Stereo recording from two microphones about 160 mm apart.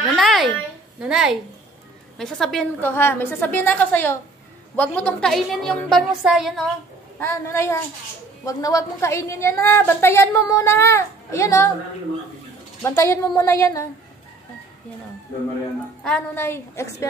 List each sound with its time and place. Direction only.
0.1 s a sound: centre (ahead or behind)
1.0 s a woman's voice: 5° right (ahead or behind)
2.8 s a woman's voice: 15° left (ahead or behind); by 6.7 s centre (ahead or behind)
7.2 s a woman's voice: 15° left (ahead or behind)
12.8 s a woman's voice: 15° left (ahead or behind)
16.3 s a woman's voice: 15° left (ahead or behind)